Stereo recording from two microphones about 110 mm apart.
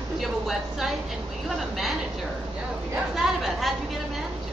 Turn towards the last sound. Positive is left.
turn(degrees=0)  # may be behind; listen again after turning